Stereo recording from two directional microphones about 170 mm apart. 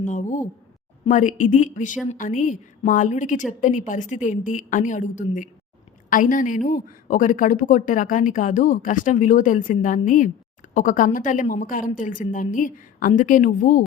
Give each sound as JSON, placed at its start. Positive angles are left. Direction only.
{"t": 0.0, "sound": "speech", "side_deg": 50}